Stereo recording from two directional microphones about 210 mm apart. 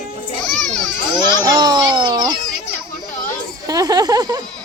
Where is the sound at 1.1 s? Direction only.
20° right (ahead or behind).